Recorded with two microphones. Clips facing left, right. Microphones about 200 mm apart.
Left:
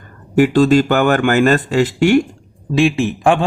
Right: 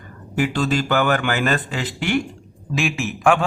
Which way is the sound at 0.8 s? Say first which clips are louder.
Left 6 dB; 45° left (ahead or behind).